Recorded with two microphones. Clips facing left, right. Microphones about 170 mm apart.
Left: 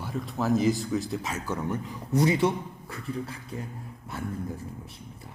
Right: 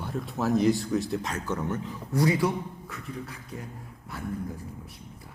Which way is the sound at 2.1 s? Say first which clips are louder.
Left 1 dB; 25° left (ahead or behind).